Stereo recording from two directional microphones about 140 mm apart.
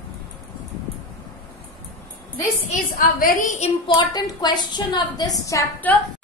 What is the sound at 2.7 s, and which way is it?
Speech, 85° left.